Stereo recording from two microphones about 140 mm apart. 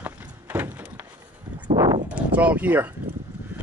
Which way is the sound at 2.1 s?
10° right (ahead or behind).